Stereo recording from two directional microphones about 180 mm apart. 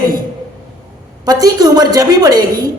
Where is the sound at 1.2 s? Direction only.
20° right (ahead or behind).